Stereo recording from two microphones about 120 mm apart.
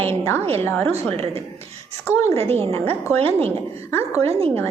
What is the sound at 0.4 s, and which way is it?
Speech, 55° right (ahead or behind).